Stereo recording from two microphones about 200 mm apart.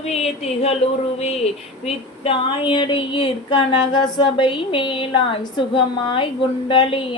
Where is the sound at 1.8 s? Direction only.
25° left (ahead or behind).